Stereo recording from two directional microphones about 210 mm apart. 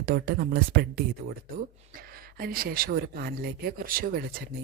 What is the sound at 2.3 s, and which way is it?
Speech, 45° right (ahead or behind).